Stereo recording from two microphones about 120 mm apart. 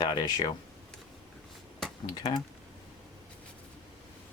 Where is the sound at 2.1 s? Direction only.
35° left (ahead or behind).